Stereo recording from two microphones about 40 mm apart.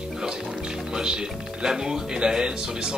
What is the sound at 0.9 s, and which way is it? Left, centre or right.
Speech, centre.